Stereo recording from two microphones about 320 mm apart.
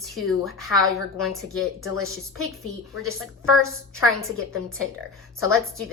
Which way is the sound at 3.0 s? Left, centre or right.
Left.